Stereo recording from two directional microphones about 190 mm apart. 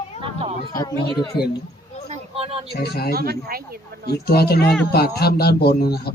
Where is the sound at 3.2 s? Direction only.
55° right (ahead or behind).